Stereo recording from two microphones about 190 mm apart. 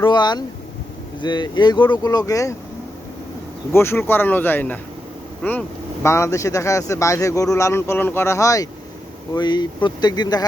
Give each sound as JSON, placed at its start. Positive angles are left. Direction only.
{"t": 0.0, "sound": "speech", "side_deg": 20}
{"t": 3.7, "sound": "speech", "side_deg": 15}